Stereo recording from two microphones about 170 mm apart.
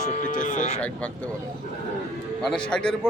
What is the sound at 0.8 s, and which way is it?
Speech, 10° left (ahead or behind).